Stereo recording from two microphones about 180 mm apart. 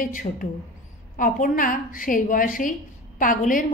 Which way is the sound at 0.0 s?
50° left (ahead or behind).